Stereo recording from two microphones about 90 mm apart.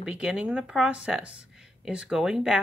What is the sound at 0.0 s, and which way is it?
Speech, 10° right (ahead or behind).